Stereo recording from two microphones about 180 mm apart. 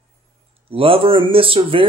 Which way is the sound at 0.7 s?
30° right (ahead or behind).